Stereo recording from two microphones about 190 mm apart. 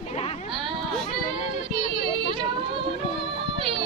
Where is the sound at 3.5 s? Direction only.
25° right (ahead or behind).